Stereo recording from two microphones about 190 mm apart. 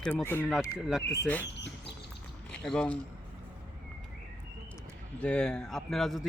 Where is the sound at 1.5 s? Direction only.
65° left (ahead or behind).